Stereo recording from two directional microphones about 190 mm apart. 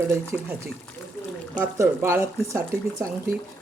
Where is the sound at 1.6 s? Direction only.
15° right (ahead or behind).